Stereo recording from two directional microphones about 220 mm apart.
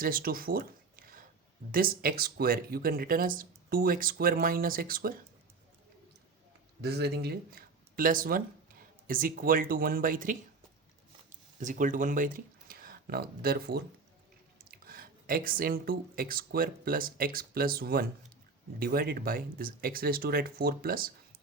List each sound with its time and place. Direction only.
0.0 s speech: 40° right (ahead or behind)
6.8 s speech: 45° right (ahead or behind)
11.6 s speech: 35° right (ahead or behind)